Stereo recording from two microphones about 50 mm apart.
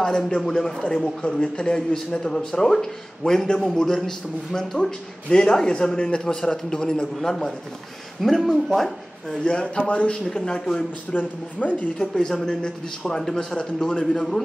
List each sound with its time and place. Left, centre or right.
0.5 s speech: centre
9.4 s a man's voice: centre
10.2 s speech: centre
11.1 s speech: left
12.0 s speech: centre
13.6 s a man's voice: left